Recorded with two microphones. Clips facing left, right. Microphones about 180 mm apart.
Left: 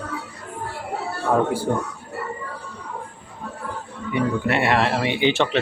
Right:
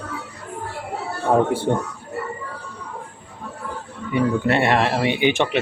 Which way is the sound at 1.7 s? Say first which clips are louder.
Right 2 dB; 20° right (ahead or behind).